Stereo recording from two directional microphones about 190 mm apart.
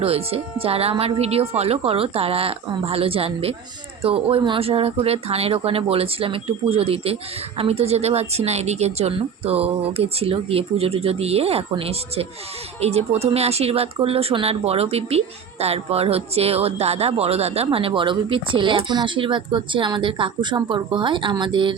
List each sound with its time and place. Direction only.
0.0 s speech: 30° right (ahead or behind)